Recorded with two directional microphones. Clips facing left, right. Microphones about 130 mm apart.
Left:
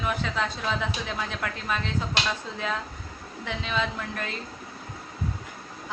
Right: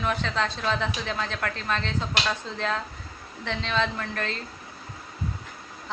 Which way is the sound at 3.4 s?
10° left (ahead or behind).